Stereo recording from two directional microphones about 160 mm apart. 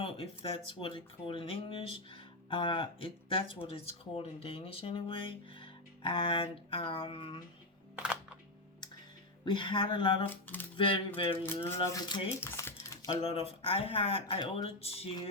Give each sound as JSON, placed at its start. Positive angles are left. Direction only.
{"t": 0.0, "sound": "speech", "side_deg": 35}
{"t": 7.9, "sound": "computer keyboard", "side_deg": -5}
{"t": 9.4, "sound": "speech", "side_deg": 30}
{"t": 11.4, "sound": "speech", "side_deg": 15}
{"t": 11.8, "sound": "speech", "side_deg": 30}
{"t": 12.4, "sound": "typing", "side_deg": 15}
{"t": 13.1, "sound": "speech", "side_deg": 40}